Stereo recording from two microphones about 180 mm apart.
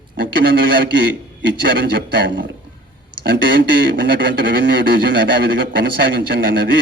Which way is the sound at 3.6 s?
55° right (ahead or behind).